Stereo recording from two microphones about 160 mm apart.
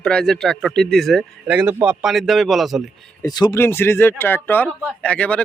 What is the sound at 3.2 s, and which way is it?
Speech, 25° left (ahead or behind).